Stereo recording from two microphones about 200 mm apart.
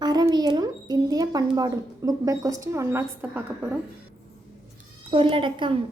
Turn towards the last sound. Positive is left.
turn(degrees=-25)  # may be behind; listen again after turning